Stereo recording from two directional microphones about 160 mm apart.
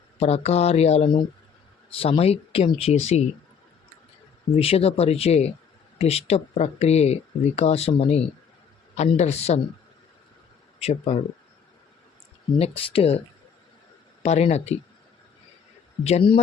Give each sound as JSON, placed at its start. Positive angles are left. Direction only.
{"t": 0.2, "sound": "speech", "side_deg": 40}
{"t": 4.5, "sound": "speech", "side_deg": 35}
{"t": 10.8, "sound": "speech", "side_deg": 40}
{"t": 12.5, "sound": "speech", "side_deg": 35}
{"t": 16.0, "sound": "speech", "side_deg": 35}